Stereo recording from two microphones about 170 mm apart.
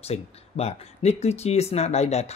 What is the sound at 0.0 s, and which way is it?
Speech, 35° left (ahead or behind).